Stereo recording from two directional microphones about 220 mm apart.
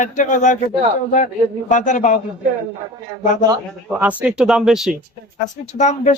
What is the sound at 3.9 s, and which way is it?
Speech, 5° right (ahead or behind).